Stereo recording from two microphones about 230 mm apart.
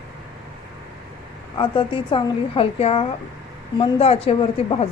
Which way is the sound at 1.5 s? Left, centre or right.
Left.